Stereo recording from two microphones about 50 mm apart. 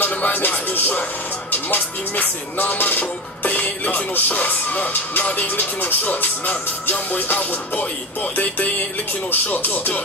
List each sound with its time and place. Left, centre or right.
0.0 s speech: left
1.5 s music: left